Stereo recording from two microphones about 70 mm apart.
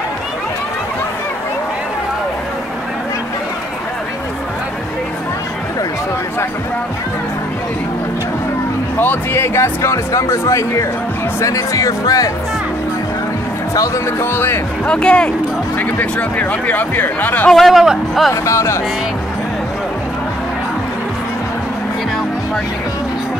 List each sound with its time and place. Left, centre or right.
8.9 s speech: left
14.2 s speech: left
14.9 s speech: centre
17.5 s speech: centre
18.3 s speech: left